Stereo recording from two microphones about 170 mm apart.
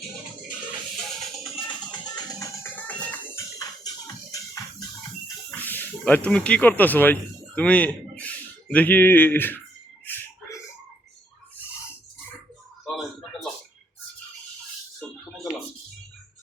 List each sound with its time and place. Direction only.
1.5 s music: 25° left (ahead or behind)
2.7 s music: 10° left (ahead or behind)
3.6 s music: 20° left (ahead or behind)
5.6 s speech: 10° left (ahead or behind)
10.1 s a sound: 10° left (ahead or behind)
12.8 s a sound: centre (ahead or behind)